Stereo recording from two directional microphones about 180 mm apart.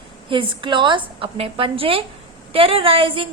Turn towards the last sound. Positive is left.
turn(degrees=-30)  # may be behind; listen again after turning